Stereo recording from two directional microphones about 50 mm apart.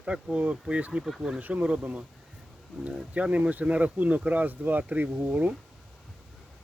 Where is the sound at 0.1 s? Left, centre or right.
Right.